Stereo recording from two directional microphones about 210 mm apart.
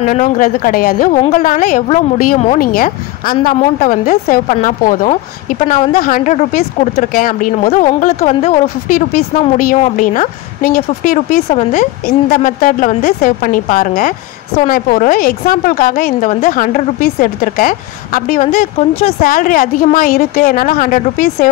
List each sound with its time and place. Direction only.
0.0 s a woman's voice: 40° left (ahead or behind)
8.9 s a woman's voice: 45° left (ahead or behind)
19.2 s a woman's voice: 40° left (ahead or behind)